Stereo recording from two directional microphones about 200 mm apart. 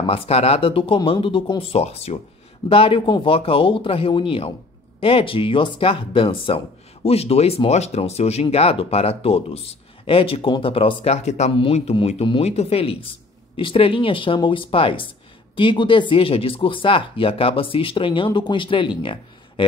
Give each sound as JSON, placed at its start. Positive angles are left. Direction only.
{"t": 0.0, "sound": "speech", "side_deg": 30}